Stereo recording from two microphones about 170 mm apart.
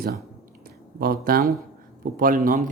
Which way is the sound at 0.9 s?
60° right (ahead or behind).